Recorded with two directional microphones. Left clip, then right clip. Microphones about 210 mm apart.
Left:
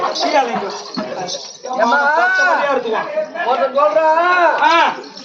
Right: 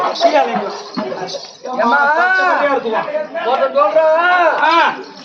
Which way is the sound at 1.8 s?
Centre (ahead or behind).